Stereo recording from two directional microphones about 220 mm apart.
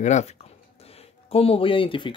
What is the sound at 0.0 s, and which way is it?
Speech, 30° left (ahead or behind).